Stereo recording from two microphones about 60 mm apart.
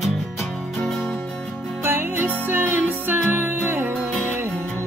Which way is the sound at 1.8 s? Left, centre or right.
Right.